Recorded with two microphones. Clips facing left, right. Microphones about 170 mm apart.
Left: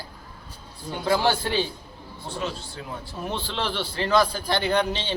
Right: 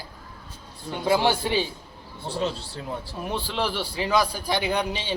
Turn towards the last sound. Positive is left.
turn(degrees=-10)  # may be behind; listen again after turning